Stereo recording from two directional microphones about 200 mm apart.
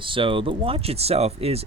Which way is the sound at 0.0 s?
25° right (ahead or behind).